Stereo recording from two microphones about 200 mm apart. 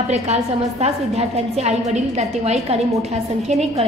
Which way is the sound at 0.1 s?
30° right (ahead or behind).